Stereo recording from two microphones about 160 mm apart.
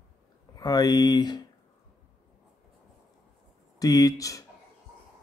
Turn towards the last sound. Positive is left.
turn(degrees=20)  # may be behind; listen again after turning